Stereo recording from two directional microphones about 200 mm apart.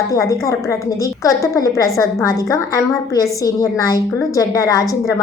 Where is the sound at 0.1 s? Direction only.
15° left (ahead or behind).